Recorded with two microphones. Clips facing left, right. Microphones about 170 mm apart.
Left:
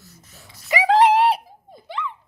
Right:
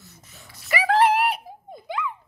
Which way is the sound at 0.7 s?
15° left (ahead or behind).